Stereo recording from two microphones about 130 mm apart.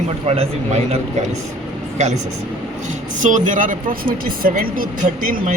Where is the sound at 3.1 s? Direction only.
80° right.